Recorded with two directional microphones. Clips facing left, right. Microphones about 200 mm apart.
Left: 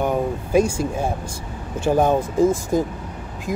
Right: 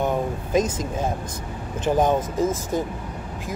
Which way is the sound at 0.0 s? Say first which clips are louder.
Left 2 dB; 10° left (ahead or behind).